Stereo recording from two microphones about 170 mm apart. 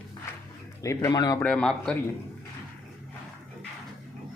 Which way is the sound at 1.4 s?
5° left (ahead or behind).